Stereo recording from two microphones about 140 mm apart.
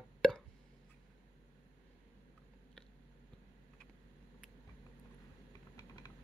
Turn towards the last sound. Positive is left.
turn(degrees=30)  # may be behind; listen again after turning